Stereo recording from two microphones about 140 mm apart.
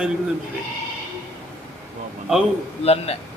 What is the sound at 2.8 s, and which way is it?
Speech, 45° left (ahead or behind).